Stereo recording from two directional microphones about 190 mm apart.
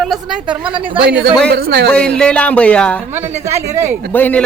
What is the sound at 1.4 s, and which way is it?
Speech, 60° right (ahead or behind).